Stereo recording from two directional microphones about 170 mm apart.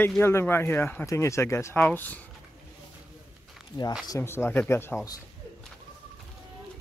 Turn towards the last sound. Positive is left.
turn(degrees=15)  # may be behind; listen again after turning